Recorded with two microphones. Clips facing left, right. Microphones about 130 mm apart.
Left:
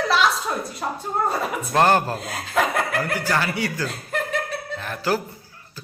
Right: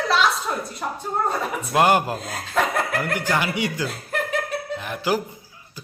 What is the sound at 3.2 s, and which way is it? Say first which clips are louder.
A woman's voice: even; 15° right (ahead or behind).